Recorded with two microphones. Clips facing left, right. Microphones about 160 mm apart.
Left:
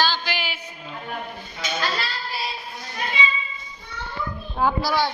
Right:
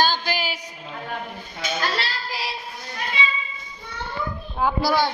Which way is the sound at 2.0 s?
85° right.